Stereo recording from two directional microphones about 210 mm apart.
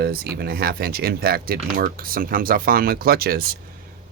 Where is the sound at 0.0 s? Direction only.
50° right (ahead or behind).